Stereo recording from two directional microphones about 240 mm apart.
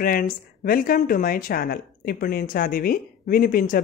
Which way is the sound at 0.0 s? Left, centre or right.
Left.